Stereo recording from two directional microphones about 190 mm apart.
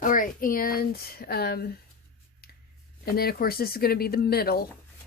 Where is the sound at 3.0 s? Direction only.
55° left (ahead or behind).